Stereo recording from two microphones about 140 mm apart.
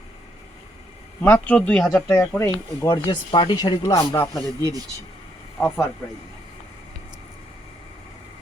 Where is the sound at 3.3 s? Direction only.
35° left (ahead or behind).